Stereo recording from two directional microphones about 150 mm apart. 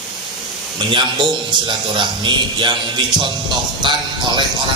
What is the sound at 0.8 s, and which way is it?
A man's voice, 35° right (ahead or behind).